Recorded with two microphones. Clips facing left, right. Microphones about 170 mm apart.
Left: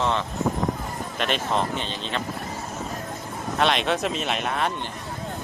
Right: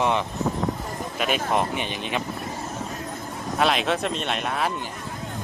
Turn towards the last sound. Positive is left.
turn(degrees=0)  # may be behind; listen again after turning